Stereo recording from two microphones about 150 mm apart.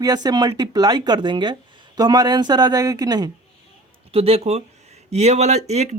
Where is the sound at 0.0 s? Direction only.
25° right (ahead or behind).